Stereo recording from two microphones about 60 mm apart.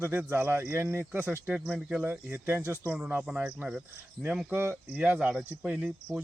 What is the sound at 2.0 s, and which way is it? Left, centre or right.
Speech, right.